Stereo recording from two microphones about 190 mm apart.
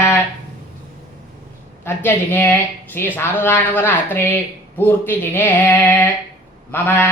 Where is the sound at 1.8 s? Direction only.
10° left (ahead or behind).